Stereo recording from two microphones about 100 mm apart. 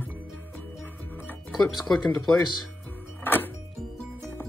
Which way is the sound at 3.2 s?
20° left (ahead or behind).